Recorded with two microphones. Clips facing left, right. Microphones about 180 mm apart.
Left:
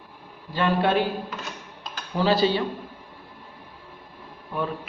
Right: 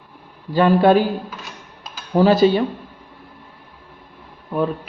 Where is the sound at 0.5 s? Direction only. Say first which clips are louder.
Right 8 dB; 40° right (ahead or behind).